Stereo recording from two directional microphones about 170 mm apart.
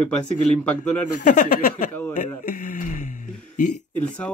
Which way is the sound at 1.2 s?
45° left (ahead or behind).